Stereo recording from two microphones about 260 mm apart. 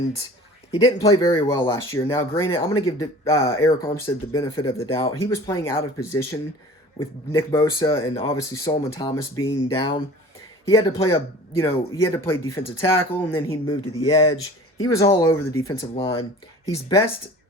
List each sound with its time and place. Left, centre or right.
0.7 s speech: centre
5.3 s speech: centre
14.0 s speech: left